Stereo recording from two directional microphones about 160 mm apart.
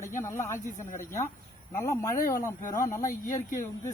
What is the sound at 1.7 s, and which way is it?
Speech, 20° left (ahead or behind).